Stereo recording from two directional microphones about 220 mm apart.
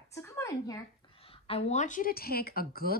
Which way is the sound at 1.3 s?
25° left (ahead or behind).